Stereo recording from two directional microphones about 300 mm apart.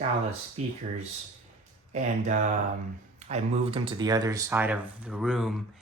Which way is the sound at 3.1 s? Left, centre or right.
Right.